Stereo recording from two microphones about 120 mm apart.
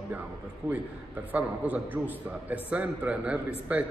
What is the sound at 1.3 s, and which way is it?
A man's voice, 10° right (ahead or behind).